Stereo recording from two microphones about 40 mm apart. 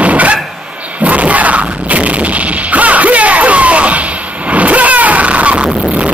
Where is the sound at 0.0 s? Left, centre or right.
Right.